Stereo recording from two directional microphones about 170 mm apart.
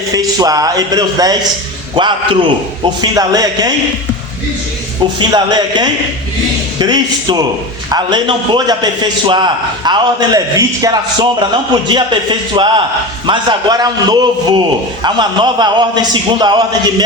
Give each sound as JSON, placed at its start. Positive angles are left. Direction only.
{"t": 0.1, "sound": "a man's voice", "side_deg": -20}
{"t": 5.3, "sound": "a man's voice", "side_deg": -25}